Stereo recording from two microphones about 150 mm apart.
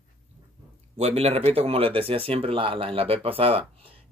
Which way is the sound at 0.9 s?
45° right (ahead or behind).